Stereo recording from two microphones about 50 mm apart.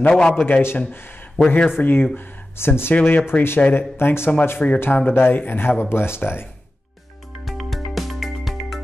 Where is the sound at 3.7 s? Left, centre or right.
Left.